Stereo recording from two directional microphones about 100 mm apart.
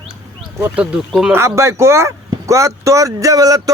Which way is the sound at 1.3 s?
30° right (ahead or behind).